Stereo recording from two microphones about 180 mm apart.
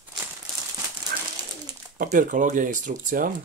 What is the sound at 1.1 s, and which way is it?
Bird, 60° right (ahead or behind).